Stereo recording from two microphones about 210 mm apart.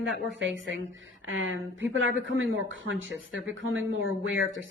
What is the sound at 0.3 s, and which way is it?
A woman's voice, 65° right (ahead or behind).